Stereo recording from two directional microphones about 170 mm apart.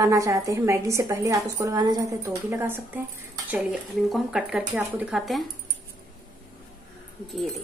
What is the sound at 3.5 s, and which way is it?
Speech, centre (ahead or behind).